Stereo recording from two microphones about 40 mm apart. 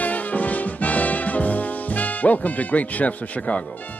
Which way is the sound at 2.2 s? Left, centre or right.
Left.